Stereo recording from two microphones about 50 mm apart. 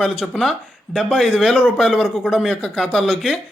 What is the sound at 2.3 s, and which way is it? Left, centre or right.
Speech, centre.